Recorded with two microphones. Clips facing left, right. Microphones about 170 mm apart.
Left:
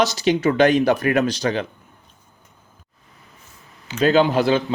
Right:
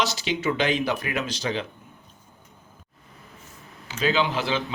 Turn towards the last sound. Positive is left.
turn(degrees=50)  # may be behind; listen again after turning